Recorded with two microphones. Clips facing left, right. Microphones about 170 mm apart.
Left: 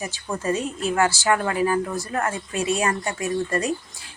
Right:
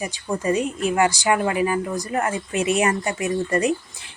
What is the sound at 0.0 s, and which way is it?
Speech, 15° right (ahead or behind).